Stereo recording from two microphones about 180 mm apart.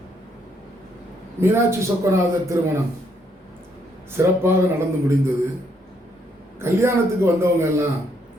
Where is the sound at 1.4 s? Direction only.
15° right (ahead or behind).